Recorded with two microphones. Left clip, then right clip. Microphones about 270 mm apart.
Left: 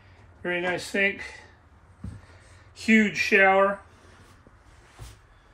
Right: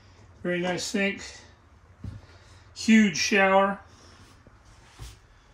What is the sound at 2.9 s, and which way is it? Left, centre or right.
Speech, centre.